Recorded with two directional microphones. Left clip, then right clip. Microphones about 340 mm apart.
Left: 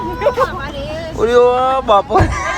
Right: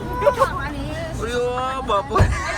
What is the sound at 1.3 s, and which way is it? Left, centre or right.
Speech, centre.